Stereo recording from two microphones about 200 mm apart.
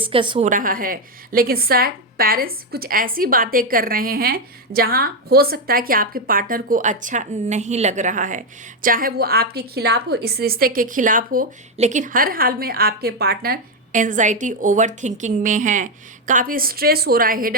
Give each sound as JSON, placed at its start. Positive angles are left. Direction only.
{"t": 0.0, "sound": "a woman's voice", "side_deg": -25}